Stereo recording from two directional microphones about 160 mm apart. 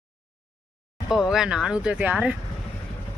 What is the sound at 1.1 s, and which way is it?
Speech, 5° right (ahead or behind).